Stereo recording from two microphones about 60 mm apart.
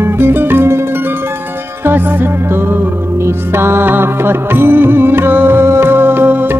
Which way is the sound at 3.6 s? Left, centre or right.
Right.